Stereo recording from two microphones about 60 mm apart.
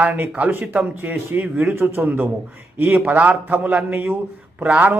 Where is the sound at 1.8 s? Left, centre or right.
Right.